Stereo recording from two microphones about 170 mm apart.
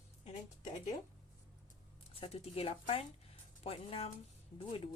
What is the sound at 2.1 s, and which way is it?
A woman's voice, 35° left (ahead or behind).